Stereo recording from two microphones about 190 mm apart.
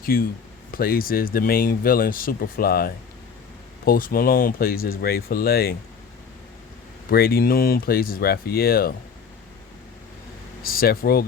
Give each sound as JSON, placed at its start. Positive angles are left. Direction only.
{"t": 0.0, "sound": "speech", "side_deg": 50}
{"t": 7.1, "sound": "speech", "side_deg": 55}
{"t": 10.6, "sound": "speech", "side_deg": 50}